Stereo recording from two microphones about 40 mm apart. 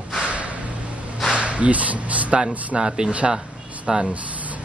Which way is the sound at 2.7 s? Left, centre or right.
Right.